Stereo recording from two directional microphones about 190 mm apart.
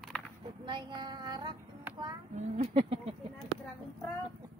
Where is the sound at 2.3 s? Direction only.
35° right (ahead or behind).